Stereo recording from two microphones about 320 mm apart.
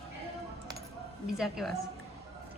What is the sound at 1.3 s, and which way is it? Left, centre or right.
Speech, centre.